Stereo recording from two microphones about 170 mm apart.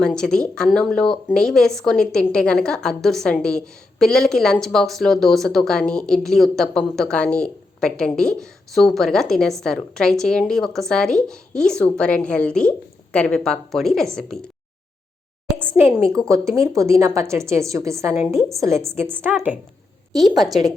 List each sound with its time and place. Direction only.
0.0 s speech: 5° left (ahead or behind)
15.5 s a woman's voice: 10° right (ahead or behind)